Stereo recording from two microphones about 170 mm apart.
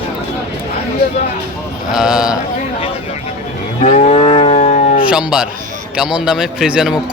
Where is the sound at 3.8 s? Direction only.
45° left (ahead or behind).